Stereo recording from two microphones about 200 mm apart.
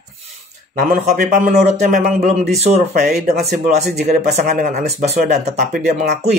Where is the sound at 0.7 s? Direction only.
45° right (ahead or behind).